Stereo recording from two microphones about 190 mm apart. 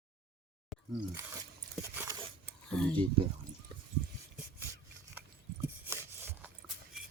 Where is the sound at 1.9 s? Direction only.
15° right (ahead or behind).